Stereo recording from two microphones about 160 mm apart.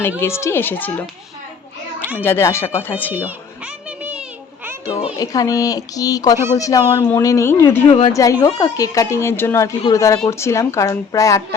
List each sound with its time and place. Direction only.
0.2 s speech: 15° left (ahead or behind)
2.1 s speech: 15° left (ahead or behind)
5.2 s speech: 20° left (ahead or behind)
7.9 s a woman's voice: 35° left (ahead or behind)
8.1 s speech: 20° left (ahead or behind)